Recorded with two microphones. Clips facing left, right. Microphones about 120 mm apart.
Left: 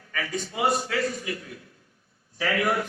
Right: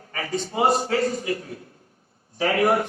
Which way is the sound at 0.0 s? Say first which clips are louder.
Right 3 dB; 35° right (ahead or behind).